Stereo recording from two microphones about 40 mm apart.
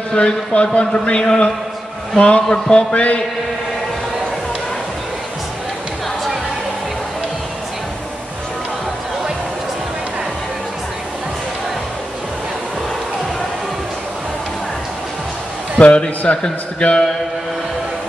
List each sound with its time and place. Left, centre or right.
0.1 s a man's voice: left
15.8 s a man's voice: left